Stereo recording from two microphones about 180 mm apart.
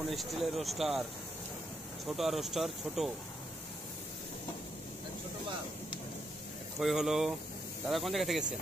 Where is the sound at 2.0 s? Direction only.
Centre (ahead or behind).